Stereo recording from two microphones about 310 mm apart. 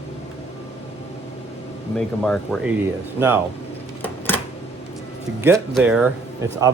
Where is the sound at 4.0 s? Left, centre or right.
Centre.